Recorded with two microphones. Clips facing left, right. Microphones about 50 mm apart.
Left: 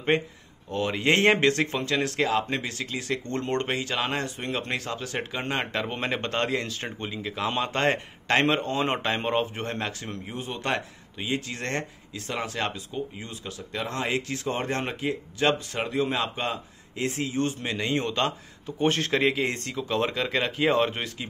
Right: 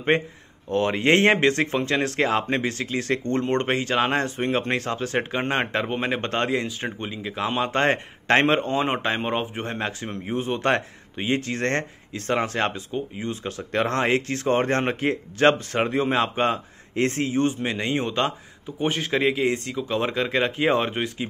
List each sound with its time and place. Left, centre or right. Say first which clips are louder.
0.1 s speech: right 2 dB; right
3.3 s speech: right 4 dB; right
5.9 s speech: right 4 dB; centre
6.2 s speech: right 3 dB; right
8.8 s speech: right 2 dB; centre
18.8 s speech: even; centre